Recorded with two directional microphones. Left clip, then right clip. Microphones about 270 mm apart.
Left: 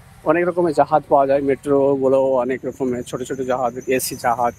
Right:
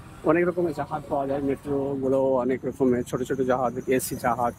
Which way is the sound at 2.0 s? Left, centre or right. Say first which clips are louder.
Left 7 dB; centre.